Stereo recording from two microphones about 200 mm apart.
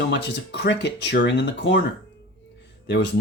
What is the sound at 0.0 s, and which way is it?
Speech, 60° left (ahead or behind).